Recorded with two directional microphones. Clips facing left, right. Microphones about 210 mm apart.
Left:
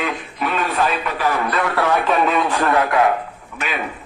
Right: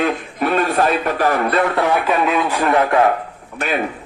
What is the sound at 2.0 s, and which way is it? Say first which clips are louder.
Speech: even; 5° right (ahead or behind).